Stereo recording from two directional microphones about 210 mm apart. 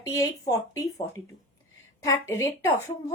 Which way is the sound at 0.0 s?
15° left (ahead or behind).